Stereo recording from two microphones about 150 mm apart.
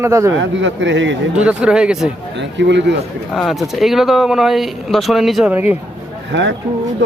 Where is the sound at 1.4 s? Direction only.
5° right (ahead or behind).